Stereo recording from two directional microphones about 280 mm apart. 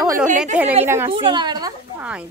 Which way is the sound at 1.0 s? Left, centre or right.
Centre.